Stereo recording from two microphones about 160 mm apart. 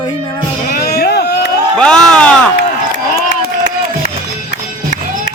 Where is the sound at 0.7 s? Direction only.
80° left.